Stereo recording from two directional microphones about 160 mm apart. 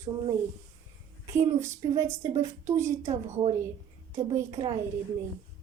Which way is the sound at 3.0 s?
45° right (ahead or behind).